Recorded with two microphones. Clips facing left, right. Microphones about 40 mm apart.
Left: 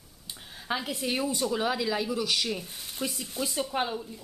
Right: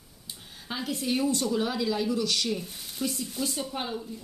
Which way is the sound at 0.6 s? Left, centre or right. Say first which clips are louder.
Even; centre.